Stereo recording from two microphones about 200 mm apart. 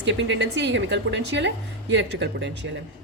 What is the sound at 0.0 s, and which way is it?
A woman's voice, 65° right (ahead or behind).